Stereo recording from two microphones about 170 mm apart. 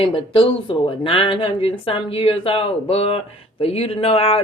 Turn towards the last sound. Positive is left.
turn(degrees=35)  # may be behind; listen again after turning